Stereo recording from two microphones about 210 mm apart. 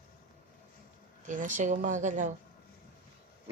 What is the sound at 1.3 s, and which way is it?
Speech, 40° right (ahead or behind).